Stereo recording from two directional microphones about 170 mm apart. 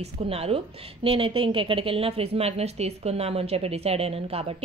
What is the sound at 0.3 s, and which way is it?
A woman's voice, 35° right (ahead or behind).